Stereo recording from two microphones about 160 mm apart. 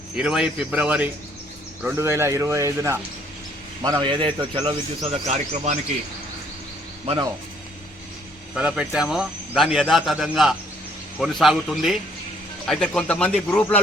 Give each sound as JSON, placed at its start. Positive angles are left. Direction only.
{"t": 0.2, "sound": "speech", "side_deg": -5}
{"t": 5.0, "sound": "speech", "side_deg": -40}
{"t": 8.5, "sound": "a man's voice", "side_deg": -5}